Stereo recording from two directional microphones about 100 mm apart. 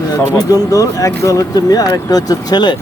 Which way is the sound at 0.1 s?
35° left (ahead or behind).